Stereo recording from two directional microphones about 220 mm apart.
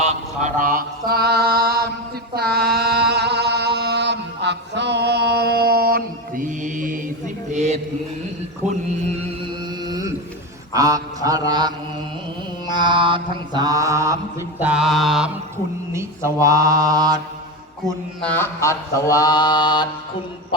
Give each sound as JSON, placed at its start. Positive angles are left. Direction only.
{"t": 0.0, "sound": "mantra", "side_deg": -30}
{"t": 2.3, "sound": "a sound", "side_deg": -45}
{"t": 9.8, "sound": "a sound", "side_deg": -15}
{"t": 10.8, "sound": "mantra", "side_deg": -15}
{"t": 14.6, "sound": "mantra", "side_deg": -5}
{"t": 15.9, "sound": "mantra", "side_deg": -10}
{"t": 18.2, "sound": "mantra", "side_deg": 10}